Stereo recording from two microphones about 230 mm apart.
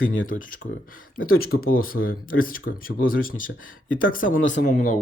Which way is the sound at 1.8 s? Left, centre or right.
Left.